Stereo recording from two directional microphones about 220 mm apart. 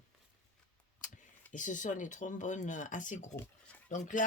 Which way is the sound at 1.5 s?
35° left (ahead or behind).